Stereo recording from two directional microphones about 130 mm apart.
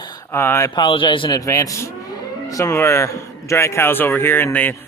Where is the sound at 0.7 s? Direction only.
40° left (ahead or behind).